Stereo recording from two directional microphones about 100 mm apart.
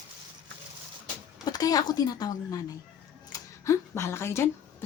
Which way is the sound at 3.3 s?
30° left (ahead or behind).